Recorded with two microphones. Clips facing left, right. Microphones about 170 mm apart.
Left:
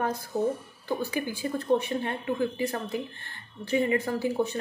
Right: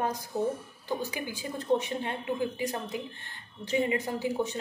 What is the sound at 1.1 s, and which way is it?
A woman's voice, 15° right (ahead or behind).